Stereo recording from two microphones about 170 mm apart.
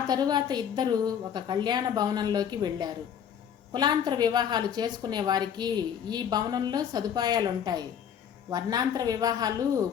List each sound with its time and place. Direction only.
0.1 s a woman's voice: 25° right (ahead or behind)